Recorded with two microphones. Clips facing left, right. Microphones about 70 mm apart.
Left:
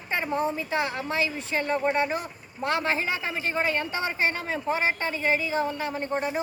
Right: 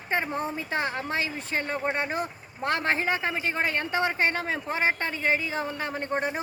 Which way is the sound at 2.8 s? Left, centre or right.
Right.